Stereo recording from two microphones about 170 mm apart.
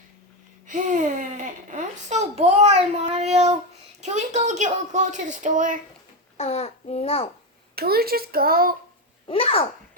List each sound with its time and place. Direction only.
0.7 s a sound: 45° right (ahead or behind)
4.0 s a woman's voice: 40° right (ahead or behind)
6.3 s a child's voice: 40° left (ahead or behind)
7.8 s a child's voice: 65° right (ahead or behind)
9.2 s a child's voice: 35° left (ahead or behind)